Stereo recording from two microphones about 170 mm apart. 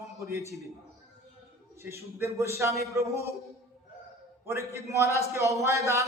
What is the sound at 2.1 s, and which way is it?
A man's voice, 15° right (ahead or behind).